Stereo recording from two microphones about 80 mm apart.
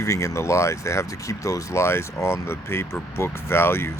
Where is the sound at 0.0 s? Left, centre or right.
Left.